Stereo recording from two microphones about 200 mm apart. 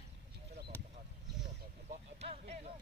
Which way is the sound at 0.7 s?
10° left (ahead or behind).